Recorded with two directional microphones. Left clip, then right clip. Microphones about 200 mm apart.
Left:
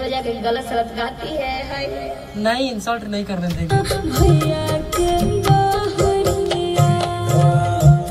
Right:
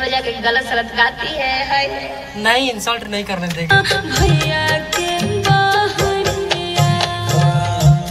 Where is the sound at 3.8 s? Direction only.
60° left (ahead or behind).